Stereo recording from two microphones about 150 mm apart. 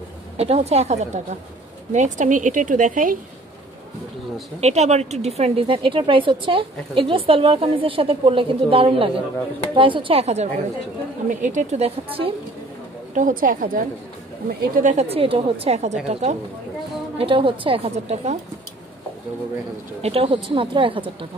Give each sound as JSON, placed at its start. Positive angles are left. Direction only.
{"t": 0.4, "sound": "a woman's voice", "side_deg": -45}
{"t": 4.6, "sound": "speech", "side_deg": -50}
{"t": 13.1, "sound": "a woman's voice", "side_deg": -65}
{"t": 14.8, "sound": "speech", "side_deg": -50}
{"t": 15.6, "sound": "speech", "side_deg": -45}
{"t": 17.2, "sound": "speech", "side_deg": -35}
{"t": 20.0, "sound": "speech", "side_deg": -40}